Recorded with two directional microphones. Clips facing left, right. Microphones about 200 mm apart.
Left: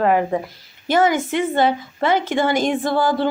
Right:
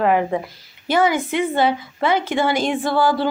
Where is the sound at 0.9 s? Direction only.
45° left (ahead or behind).